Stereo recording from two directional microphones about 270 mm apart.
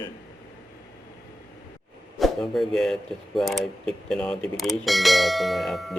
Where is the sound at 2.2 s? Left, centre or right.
Centre.